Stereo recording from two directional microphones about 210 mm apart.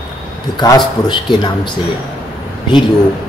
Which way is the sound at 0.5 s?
20° left (ahead or behind).